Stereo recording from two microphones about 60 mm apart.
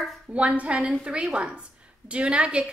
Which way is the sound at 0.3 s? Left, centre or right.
Right.